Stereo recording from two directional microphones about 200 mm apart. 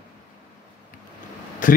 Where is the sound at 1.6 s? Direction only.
40° left (ahead or behind).